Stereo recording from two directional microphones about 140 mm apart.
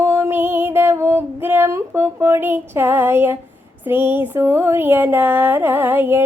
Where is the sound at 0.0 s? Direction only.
15° right (ahead or behind).